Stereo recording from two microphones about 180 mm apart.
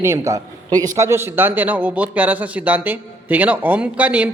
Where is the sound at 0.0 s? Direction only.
15° right (ahead or behind).